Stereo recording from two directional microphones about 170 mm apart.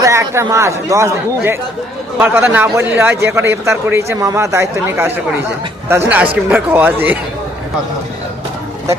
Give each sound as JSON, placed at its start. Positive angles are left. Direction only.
{"t": 0.0, "sound": "a man's voice", "side_deg": -15}
{"t": 2.1, "sound": "a man's voice", "side_deg": -15}